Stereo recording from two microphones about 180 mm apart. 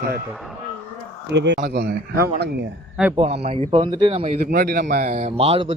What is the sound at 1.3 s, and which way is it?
Speech, 75° right (ahead or behind).